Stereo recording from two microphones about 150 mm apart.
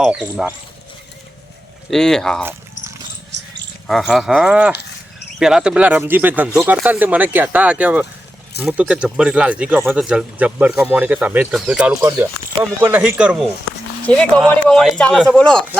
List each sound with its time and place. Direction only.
0.0 s speech: 5° right (ahead or behind)
1.9 s speech: 5° left (ahead or behind)
2.4 s a sound: 15° right (ahead or behind)
3.8 s speech: centre (ahead or behind)
14.1 s speech: 5° left (ahead or behind)